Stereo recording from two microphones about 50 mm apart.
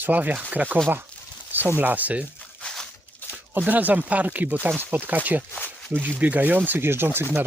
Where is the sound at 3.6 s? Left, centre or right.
Right.